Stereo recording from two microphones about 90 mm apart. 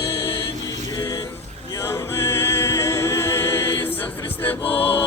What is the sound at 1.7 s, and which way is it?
A capella, 30° left (ahead or behind).